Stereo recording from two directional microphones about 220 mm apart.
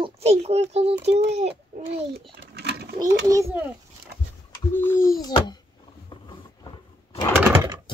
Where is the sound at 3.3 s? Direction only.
10° right (ahead or behind).